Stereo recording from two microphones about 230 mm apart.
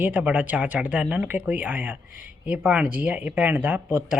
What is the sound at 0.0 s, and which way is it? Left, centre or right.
Speech, centre.